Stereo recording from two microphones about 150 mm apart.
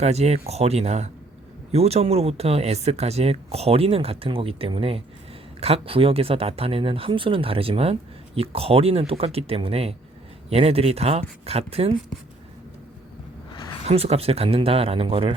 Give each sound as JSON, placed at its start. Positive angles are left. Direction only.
{"t": 0.0, "sound": "speech", "side_deg": -45}
{"t": 13.8, "sound": "speech", "side_deg": -45}